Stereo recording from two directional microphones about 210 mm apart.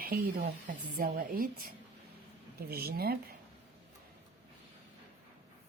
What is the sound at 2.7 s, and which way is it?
Speech, 50° right (ahead or behind).